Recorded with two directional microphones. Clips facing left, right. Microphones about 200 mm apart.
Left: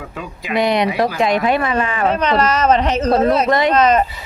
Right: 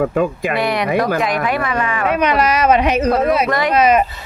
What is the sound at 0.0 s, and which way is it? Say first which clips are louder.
Speech: right 14 dB; 50° right (ahead or behind).